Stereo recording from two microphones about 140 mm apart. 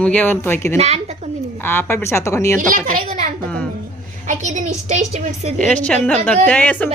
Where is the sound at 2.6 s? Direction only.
70° right (ahead or behind).